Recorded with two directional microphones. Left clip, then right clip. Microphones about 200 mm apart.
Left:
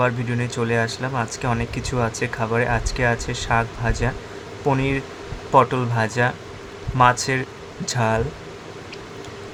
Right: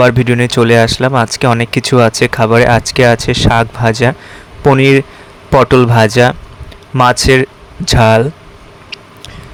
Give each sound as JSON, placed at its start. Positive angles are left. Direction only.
{"t": 0.0, "sound": "speech", "side_deg": -50}